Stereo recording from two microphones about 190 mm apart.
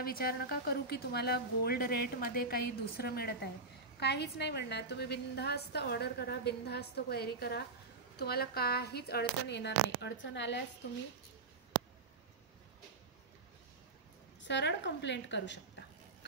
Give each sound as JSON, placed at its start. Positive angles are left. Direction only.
{"t": 0.0, "sound": "a woman's voice", "side_deg": 55}
{"t": 14.4, "sound": "a woman's voice", "side_deg": 65}